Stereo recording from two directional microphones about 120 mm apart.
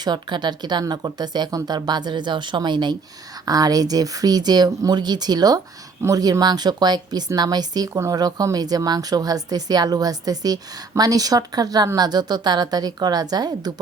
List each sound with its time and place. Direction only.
0.0 s speech: 35° right (ahead or behind)